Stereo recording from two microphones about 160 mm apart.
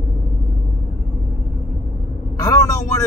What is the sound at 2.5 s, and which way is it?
Speech, 20° left (ahead or behind).